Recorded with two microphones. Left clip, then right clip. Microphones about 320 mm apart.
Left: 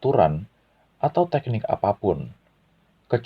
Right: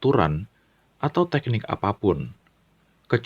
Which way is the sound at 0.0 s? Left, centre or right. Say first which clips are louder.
Left 2 dB; right.